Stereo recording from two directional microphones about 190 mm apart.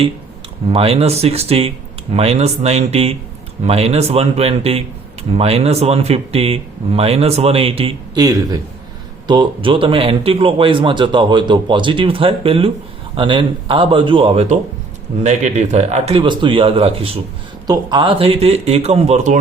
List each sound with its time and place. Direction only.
0.7 s a man's voice: 30° right (ahead or behind)